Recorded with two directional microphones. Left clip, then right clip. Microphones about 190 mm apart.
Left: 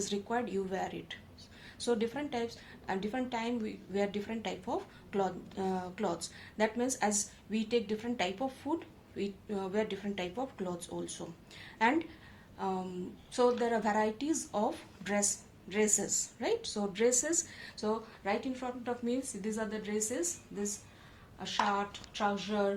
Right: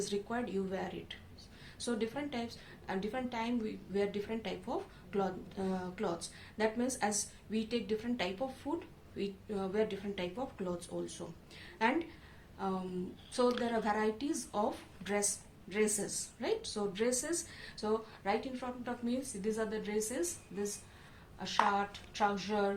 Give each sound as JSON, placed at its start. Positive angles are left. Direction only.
{"t": 0.0, "sound": "a woman's voice", "side_deg": 35}